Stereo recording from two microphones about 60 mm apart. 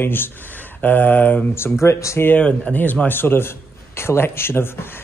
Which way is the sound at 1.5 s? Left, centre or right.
Left.